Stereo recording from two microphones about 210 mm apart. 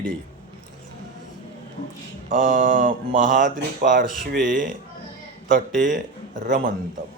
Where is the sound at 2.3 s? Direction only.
40° right (ahead or behind).